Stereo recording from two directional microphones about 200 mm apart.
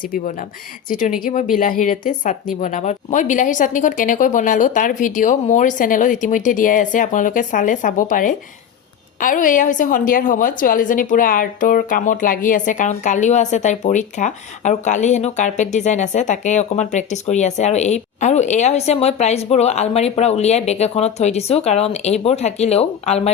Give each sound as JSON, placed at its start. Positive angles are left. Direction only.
{"t": 0.0, "sound": "speech", "side_deg": 45}